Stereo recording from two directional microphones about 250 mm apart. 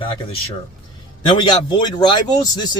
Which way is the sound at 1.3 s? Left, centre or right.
Centre.